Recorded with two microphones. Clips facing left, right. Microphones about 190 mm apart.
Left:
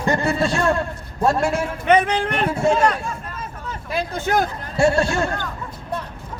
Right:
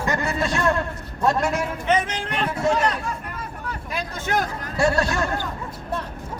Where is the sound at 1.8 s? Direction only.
60° left (ahead or behind).